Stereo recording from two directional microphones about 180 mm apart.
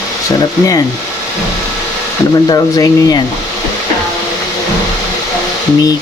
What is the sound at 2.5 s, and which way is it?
Speech, 20° left (ahead or behind).